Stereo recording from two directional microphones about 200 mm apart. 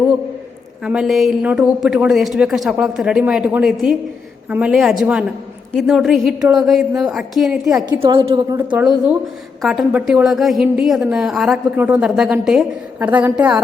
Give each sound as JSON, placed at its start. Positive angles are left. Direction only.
{"t": 0.9, "sound": "a woman's voice", "side_deg": -5}
{"t": 7.9, "sound": "a woman's voice", "side_deg": -25}
{"t": 8.5, "sound": "a woman's voice", "side_deg": -5}